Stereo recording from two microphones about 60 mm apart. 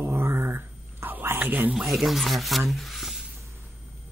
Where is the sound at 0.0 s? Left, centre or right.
Right.